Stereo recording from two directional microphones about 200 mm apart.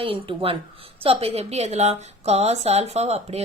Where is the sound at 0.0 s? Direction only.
30° right (ahead or behind).